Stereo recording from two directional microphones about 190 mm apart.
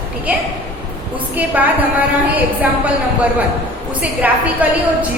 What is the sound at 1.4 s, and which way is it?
A woman's voice, 10° right (ahead or behind).